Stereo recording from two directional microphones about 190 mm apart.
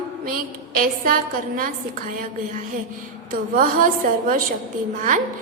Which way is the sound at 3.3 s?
45° right (ahead or behind).